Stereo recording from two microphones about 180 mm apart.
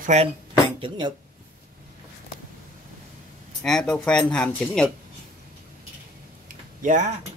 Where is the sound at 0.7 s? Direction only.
25° right (ahead or behind).